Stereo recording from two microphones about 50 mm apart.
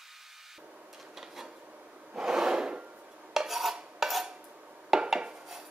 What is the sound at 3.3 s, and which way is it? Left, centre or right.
Cutlery, centre.